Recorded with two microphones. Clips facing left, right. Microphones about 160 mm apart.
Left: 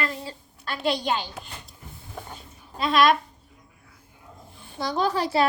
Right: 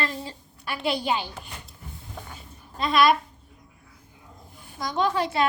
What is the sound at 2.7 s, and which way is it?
Speech, centre (ahead or behind).